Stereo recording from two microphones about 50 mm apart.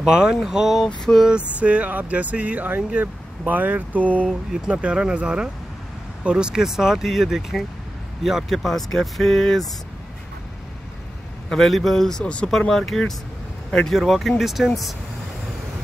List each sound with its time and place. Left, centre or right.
0.0 s speech: centre
1.1 s a sound: left
1.6 s speech: right
4.0 s speech: left
4.6 s speech: right; by 9.7 s centre
11.4 s a man's voice: centre
12.4 s a man's voice: centre